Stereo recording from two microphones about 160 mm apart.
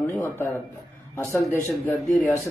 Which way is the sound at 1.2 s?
15° left (ahead or behind).